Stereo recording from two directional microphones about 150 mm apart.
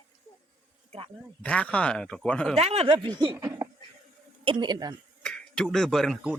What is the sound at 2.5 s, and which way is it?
Speech, 45° right (ahead or behind).